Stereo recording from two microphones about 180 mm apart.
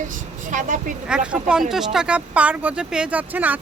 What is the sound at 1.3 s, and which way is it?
Speech, 5° right (ahead or behind).